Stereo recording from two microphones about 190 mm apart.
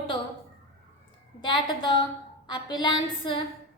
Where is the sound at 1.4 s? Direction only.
25° left (ahead or behind).